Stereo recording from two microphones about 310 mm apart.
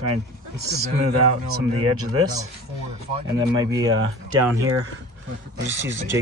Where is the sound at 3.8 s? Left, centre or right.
Right.